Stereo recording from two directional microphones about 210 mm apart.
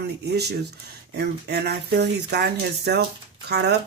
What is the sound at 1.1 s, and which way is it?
Speech, 50° right (ahead or behind).